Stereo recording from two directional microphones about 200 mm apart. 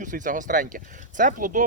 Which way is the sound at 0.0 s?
40° right (ahead or behind).